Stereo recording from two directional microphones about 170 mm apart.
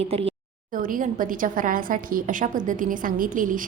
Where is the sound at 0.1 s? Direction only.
35° right (ahead or behind).